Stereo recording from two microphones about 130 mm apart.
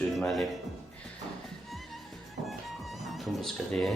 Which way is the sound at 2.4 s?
Centre (ahead or behind).